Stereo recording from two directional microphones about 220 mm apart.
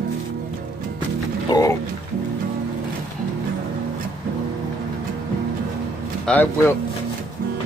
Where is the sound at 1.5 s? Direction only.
15° left (ahead or behind).